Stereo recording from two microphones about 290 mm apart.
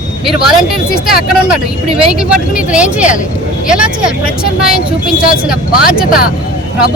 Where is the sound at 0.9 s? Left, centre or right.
Left.